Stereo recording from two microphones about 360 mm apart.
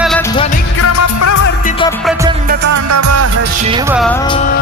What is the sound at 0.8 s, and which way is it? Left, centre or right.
Music, left.